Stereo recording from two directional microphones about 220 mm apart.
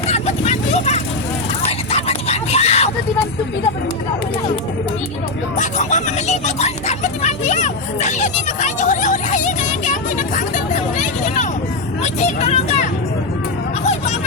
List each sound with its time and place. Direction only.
0.1 s vehicle: 30° left (ahead or behind)
1.6 s a sound: 30° left (ahead or behind)
5.5 s music: 35° left (ahead or behind)
12.0 s speech: 30° left (ahead or behind)